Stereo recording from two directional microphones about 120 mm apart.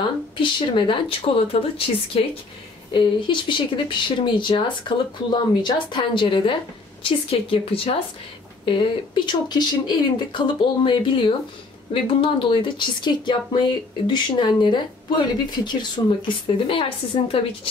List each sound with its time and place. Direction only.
0.4 s speech: 45° left (ahead or behind)
2.9 s speech: 45° left (ahead or behind)